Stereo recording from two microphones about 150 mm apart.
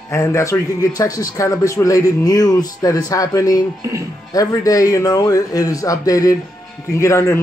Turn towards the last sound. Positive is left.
turn(degrees=20)  # may be behind; listen again after turning